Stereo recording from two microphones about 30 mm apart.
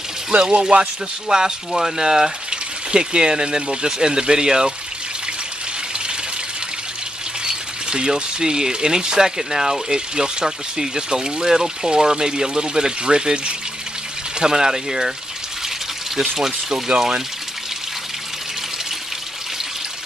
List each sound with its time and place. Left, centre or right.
0.6 s speech: right
1.7 s speech: centre
2.5 s speech: right
7.4 s speech: right
16.2 s speech: centre